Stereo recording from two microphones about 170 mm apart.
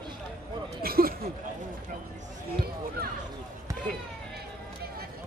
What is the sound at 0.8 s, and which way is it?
Speech, 60° right (ahead or behind).